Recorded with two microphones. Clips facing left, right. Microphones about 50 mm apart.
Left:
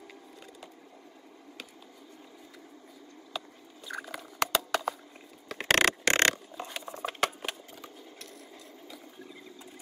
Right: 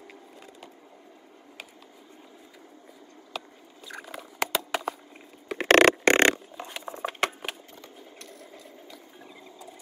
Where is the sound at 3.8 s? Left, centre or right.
Centre.